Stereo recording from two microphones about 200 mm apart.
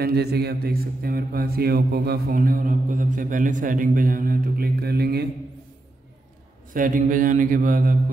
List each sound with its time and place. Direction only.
0.0 s mantra: 55° right (ahead or behind)
6.7 s mantra: 40° right (ahead or behind)